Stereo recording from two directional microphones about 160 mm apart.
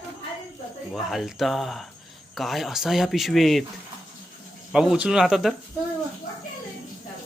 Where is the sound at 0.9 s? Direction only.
Centre (ahead or behind).